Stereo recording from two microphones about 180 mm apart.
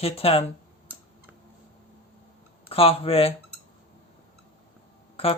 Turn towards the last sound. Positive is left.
turn(degrees=30)  # may be behind; listen again after turning